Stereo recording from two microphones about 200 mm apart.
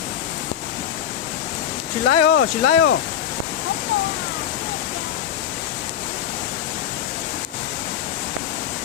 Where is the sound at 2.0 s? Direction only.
60° left (ahead or behind).